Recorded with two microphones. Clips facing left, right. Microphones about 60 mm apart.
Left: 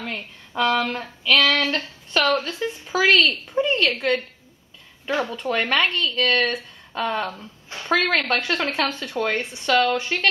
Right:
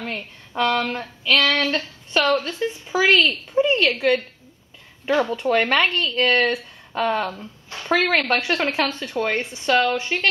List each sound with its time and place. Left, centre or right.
0.0 s speech: centre
1.6 s a sound: centre
2.4 s speech: centre